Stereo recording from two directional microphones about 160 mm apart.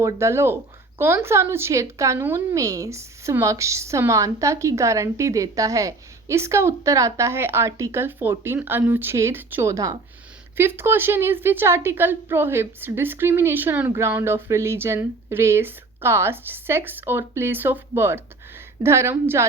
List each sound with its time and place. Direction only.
0.0 s speech: 15° right (ahead or behind)